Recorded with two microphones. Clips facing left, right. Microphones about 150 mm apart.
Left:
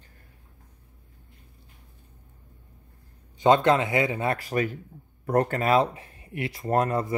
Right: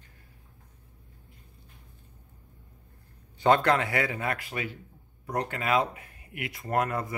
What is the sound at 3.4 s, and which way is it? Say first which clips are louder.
Speech: left 3 dB; 20° left (ahead or behind).